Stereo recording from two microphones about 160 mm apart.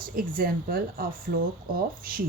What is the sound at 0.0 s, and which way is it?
Speech, 65° right (ahead or behind).